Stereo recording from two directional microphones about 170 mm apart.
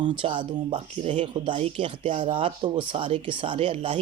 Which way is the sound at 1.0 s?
40° right (ahead or behind).